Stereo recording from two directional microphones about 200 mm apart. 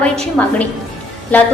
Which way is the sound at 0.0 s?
5° left (ahead or behind).